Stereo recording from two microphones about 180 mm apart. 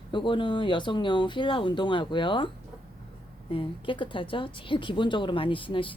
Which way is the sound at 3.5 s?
30° left (ahead or behind).